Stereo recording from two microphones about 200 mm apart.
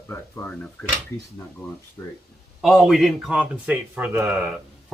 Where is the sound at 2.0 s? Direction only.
15° left (ahead or behind).